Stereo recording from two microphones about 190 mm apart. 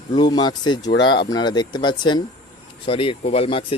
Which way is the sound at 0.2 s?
25° left (ahead or behind).